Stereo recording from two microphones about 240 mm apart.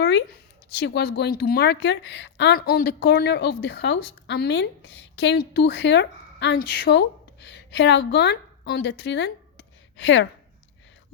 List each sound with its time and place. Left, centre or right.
0.0 s a woman's voice: left